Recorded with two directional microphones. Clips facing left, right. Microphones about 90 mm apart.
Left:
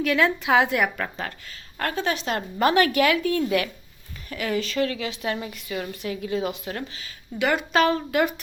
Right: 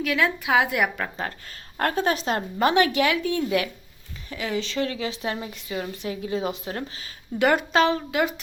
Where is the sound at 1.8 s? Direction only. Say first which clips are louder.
Right 3 dB; 40° right (ahead or behind).